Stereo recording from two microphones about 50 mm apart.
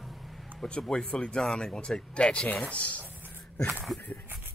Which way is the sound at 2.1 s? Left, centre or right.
Left.